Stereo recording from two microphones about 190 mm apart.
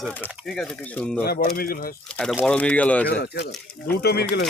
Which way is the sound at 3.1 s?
60° left (ahead or behind).